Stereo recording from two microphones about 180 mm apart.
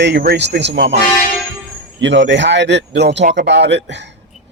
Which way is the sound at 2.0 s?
85° right.